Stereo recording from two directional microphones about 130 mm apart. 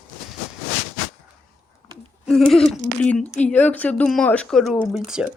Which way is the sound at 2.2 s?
5° left (ahead or behind).